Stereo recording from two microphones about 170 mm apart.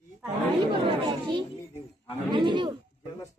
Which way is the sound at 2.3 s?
30° right (ahead or behind).